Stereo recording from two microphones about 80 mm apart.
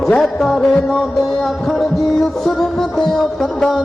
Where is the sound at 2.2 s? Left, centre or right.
Centre.